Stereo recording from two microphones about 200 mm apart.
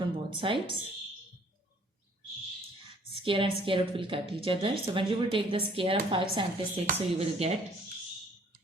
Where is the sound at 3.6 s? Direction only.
25° right (ahead or behind).